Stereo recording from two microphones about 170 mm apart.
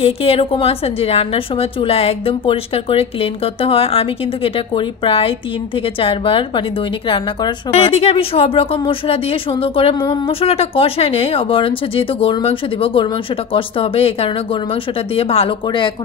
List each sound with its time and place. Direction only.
0.0 s speech: 35° left (ahead or behind)